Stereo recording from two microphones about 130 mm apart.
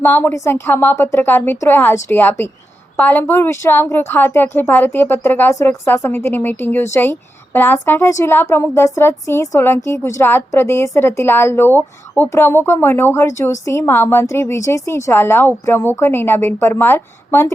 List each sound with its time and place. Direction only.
0.0 s a woman's voice: 15° left (ahead or behind)